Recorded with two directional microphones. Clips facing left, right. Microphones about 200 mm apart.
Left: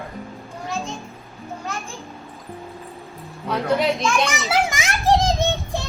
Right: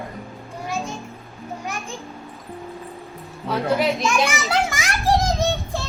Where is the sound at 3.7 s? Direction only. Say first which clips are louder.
Left 1 dB; centre (ahead or behind).